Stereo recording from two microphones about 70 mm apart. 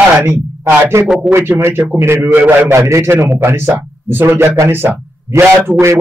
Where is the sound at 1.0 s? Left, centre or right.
Centre.